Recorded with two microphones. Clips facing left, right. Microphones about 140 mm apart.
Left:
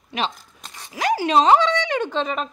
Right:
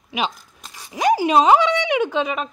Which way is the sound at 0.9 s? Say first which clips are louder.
Right 2 dB; 15° right (ahead or behind).